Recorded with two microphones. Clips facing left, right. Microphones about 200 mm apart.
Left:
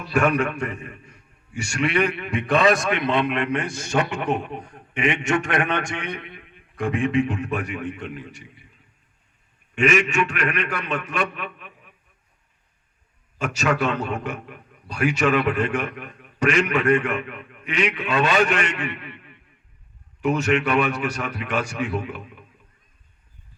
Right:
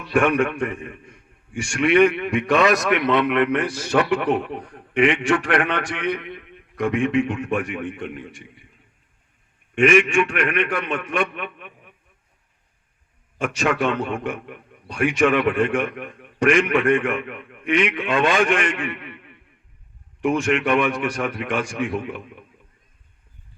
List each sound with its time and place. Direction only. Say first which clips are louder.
0.2 s a man's voice: right 2 dB; 40° left (ahead or behind)
9.7 s a man's voice: right 4 dB; 40° left (ahead or behind)
13.4 s a man's voice: right 1 dB; 40° left (ahead or behind)
20.2 s a man's voice: right 1 dB; 40° left (ahead or behind)